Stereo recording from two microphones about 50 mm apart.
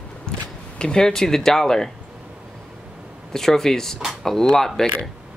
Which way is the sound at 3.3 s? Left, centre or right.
Centre.